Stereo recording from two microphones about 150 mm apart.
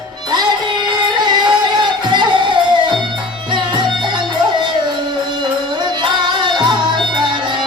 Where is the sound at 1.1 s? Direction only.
30° right (ahead or behind).